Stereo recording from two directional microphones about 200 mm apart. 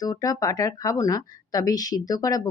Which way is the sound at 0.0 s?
20° left (ahead or behind).